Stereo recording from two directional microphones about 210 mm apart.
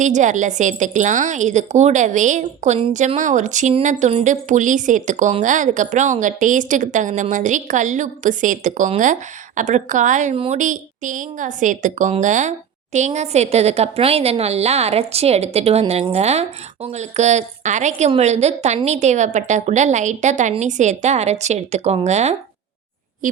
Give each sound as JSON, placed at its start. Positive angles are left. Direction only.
{"t": 0.0, "sound": "a woman's voice", "side_deg": -35}